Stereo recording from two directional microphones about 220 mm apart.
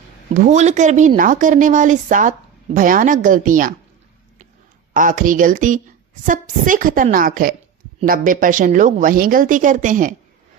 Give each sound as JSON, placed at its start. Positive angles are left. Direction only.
{"t": 0.3, "sound": "a woman's voice", "side_deg": -35}
{"t": 4.9, "sound": "a woman's voice", "side_deg": -40}